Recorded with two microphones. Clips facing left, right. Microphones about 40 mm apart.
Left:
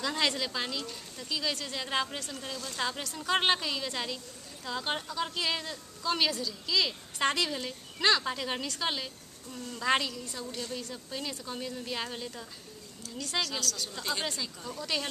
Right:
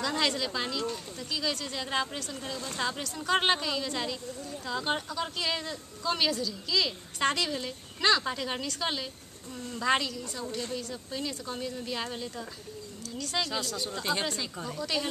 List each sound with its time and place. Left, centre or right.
0.0 s speech: centre
2.5 s a woman's voice: right
2.8 s speech: centre
13.4 s a woman's voice: centre
14.8 s speech: centre